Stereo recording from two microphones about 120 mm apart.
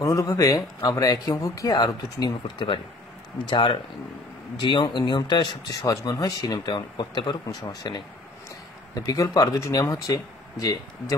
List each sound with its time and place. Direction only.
0.0 s speech: 25° left (ahead or behind)
2.4 s speech: 45° left (ahead or behind); by 11.1 s 30° left (ahead or behind)